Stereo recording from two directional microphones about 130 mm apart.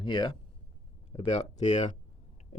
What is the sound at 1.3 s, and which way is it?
Speech, 60° left (ahead or behind).